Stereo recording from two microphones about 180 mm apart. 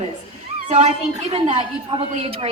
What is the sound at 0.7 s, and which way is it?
A woman's voice, 40° right (ahead or behind).